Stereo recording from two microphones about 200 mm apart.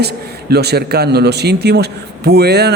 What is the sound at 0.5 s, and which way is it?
A man's voice, 55° right (ahead or behind).